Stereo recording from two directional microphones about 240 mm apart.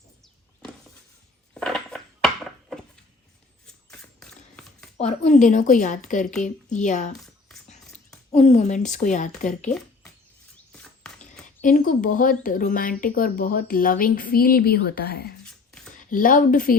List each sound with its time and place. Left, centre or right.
1.5 s a sound: centre
4.2 s a sound: centre
4.9 s speech: left
8.3 s speech: left
9.6 s speech: centre
11.6 s speech: left